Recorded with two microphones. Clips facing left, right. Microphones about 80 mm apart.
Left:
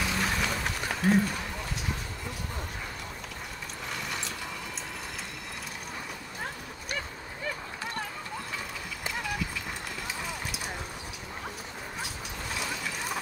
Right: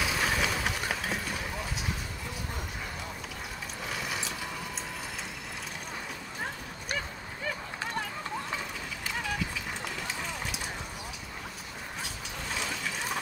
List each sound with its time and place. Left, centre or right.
0.0 s vehicle: centre
3.9 s mechanisms: centre
10.0 s run: centre
12.4 s a sound: centre